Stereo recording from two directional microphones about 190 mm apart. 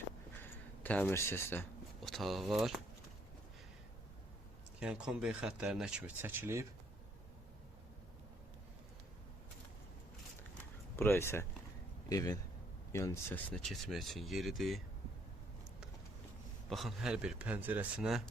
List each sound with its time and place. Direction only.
0.4 s speech: 10° left (ahead or behind)
2.0 s speech: centre (ahead or behind)
4.8 s speech: 5° right (ahead or behind)
10.9 s speech: 10° left (ahead or behind)
16.6 s speech: centre (ahead or behind)